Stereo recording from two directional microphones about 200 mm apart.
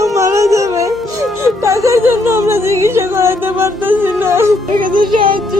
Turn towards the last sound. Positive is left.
turn(degrees=-25)  # may be behind; listen again after turning